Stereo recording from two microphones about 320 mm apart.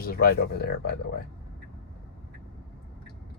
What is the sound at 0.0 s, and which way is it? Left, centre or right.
Speech, left.